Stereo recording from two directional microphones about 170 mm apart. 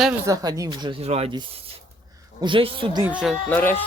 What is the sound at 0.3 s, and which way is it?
Speech, 20° right (ahead or behind).